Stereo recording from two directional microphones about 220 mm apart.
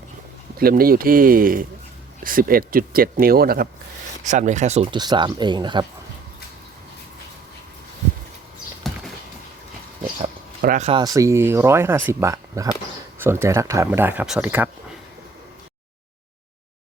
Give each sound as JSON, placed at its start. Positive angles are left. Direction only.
{"t": 0.6, "sound": "speech", "side_deg": -40}
{"t": 4.2, "sound": "speech", "side_deg": -35}
{"t": 10.2, "sound": "speech", "side_deg": -35}